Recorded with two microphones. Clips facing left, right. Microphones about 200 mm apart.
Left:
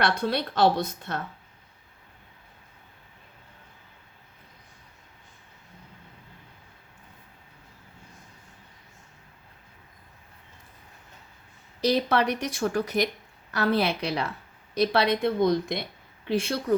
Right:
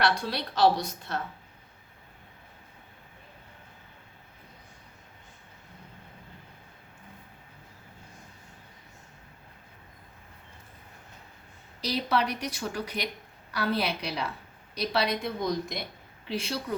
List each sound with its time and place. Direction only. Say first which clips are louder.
0.0 s a woman's voice: left 3 dB; 55° left (ahead or behind)
12.0 s a woman's voice: left 3 dB; 50° left (ahead or behind)